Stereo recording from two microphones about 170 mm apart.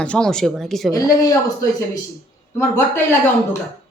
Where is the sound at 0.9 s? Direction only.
20° left (ahead or behind).